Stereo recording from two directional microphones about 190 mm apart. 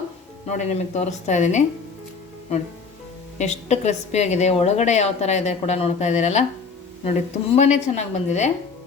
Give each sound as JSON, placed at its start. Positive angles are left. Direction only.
{"t": 0.4, "sound": "a woman's voice", "side_deg": 35}
{"t": 3.3, "sound": "a woman's voice", "side_deg": 35}